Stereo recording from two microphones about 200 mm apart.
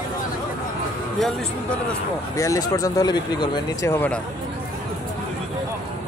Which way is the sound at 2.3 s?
15° left (ahead or behind).